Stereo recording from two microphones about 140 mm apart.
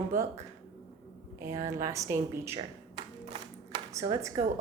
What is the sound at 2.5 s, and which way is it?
Tap, 35° right (ahead or behind).